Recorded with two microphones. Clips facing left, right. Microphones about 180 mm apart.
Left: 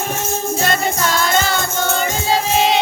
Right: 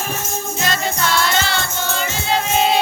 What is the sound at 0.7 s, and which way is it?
Music, 45° left (ahead or behind).